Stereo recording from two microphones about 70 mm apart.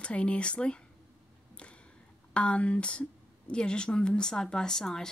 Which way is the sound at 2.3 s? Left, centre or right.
Centre.